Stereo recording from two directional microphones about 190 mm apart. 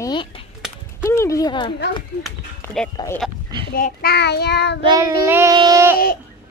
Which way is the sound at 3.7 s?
55° left (ahead or behind).